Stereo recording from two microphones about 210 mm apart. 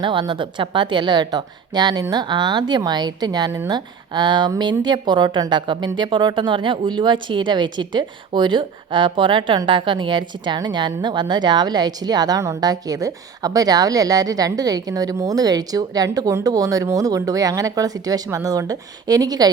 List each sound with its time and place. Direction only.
0.0 s a woman's voice: 20° right (ahead or behind)